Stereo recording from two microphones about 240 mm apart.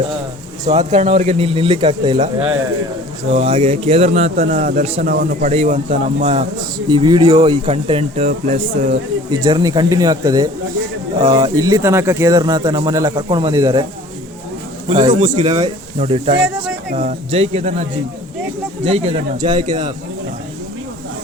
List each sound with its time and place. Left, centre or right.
0.7 s speech: right
3.3 s speech: right
5.0 s speech: right; by 13.8 s centre
14.8 s speech: right
16.4 s speech: centre
16.9 s speech: right
18.9 s speech: right